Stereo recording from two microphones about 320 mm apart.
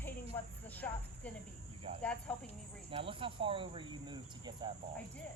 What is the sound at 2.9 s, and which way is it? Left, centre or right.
Speech, centre.